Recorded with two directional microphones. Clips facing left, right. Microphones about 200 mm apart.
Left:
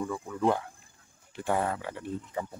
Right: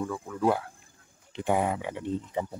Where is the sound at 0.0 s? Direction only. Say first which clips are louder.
Right 1 dB; centre (ahead or behind).